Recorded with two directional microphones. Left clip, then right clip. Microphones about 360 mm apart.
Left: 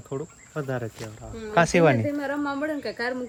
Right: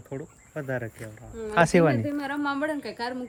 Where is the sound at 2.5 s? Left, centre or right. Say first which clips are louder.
Even; right.